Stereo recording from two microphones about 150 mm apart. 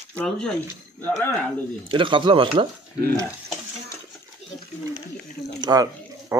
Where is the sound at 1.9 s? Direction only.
35° right (ahead or behind).